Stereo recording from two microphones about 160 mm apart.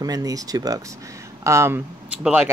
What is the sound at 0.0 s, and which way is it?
Speech, 20° right (ahead or behind).